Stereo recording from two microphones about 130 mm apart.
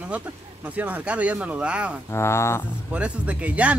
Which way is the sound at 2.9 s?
10° right (ahead or behind).